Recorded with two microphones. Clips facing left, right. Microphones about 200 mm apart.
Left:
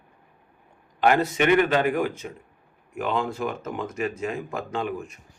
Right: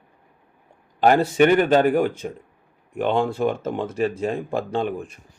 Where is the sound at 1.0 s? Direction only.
40° right (ahead or behind).